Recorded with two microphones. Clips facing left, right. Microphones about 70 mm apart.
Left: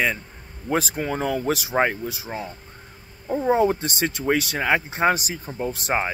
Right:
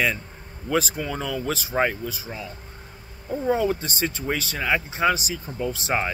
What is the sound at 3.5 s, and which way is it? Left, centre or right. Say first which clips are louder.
Speech: left 3 dB; left.